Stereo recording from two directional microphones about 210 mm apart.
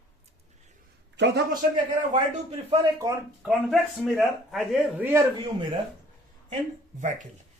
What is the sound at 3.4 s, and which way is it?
A man's voice, centre (ahead or behind).